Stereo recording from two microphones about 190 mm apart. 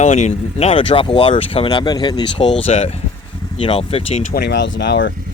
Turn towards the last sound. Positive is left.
turn(degrees=65)  # may be behind; listen again after turning